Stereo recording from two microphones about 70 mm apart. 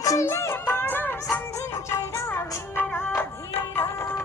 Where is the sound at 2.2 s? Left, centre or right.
Left.